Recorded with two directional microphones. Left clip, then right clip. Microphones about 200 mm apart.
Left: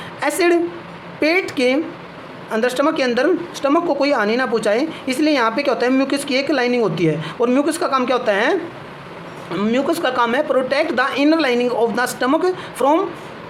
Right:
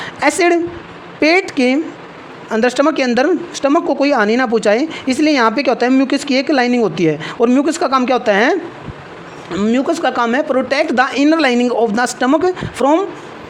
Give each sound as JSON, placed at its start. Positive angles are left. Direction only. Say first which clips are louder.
{"t": 0.0, "sound": "a woman's voice", "louder": "right 4 dB", "side_deg": -40}
{"t": 9.5, "sound": "a woman's voice", "louder": "right 3 dB", "side_deg": -25}